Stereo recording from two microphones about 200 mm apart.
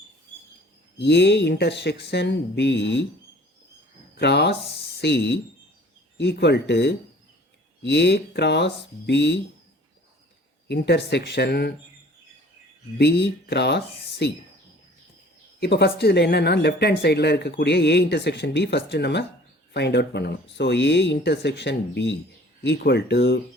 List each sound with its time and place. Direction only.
0.9 s speech: 55° left (ahead or behind)
4.2 s speech: 55° left (ahead or behind)
10.7 s speech: 55° left (ahead or behind)
13.0 s speech: 55° left (ahead or behind)
15.6 s speech: 55° left (ahead or behind)